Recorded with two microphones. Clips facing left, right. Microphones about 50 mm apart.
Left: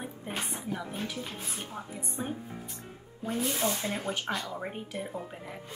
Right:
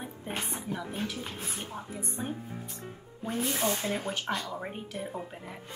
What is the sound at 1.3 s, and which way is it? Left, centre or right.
Speech, right.